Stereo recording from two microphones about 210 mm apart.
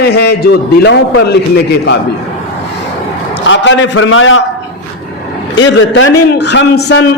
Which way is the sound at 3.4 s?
60° left (ahead or behind).